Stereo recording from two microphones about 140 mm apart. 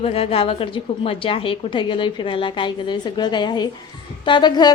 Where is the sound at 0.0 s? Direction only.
45° left (ahead or behind).